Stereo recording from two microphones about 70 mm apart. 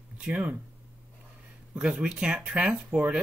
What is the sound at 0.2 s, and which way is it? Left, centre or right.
Speech, centre.